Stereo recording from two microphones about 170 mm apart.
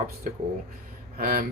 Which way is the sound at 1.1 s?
65° right (ahead or behind).